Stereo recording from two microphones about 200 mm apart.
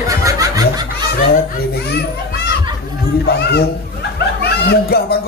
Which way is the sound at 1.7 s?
55° left (ahead or behind).